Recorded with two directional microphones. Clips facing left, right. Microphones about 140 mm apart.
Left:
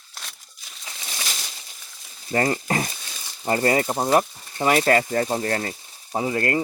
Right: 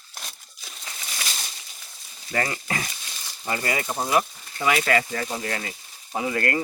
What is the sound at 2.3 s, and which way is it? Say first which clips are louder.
Speech: left 5 dB; 35° left (ahead or behind).